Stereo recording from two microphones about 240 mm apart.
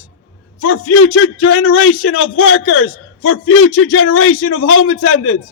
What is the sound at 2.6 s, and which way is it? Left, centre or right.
A man's voice, left.